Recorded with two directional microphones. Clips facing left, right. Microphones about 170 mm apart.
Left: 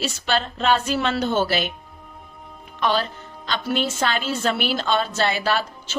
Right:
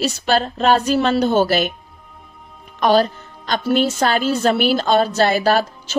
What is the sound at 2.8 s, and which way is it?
Music, 45° right (ahead or behind).